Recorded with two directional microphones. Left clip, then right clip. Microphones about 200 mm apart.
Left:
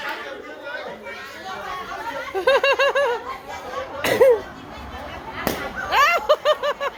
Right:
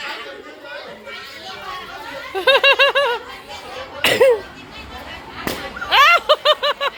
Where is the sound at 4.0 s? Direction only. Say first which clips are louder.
Right 2 dB; 10° right (ahead or behind).